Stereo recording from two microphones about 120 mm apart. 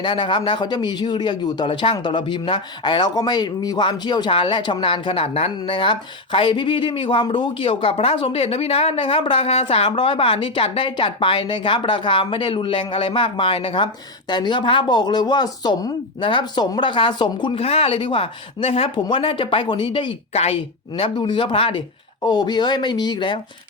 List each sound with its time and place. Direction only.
0.0 s a man's voice: 40° left (ahead or behind)
17.6 s a man's voice: 55° left (ahead or behind)
20.3 s speech: 65° left (ahead or behind)
20.9 s speech: 45° left (ahead or behind)